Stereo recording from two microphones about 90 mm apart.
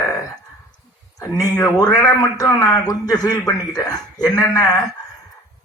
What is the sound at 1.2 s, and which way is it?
A man's voice, 35° left (ahead or behind).